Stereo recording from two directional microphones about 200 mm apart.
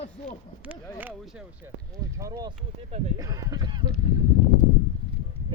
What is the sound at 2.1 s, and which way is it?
Speech, 15° right (ahead or behind).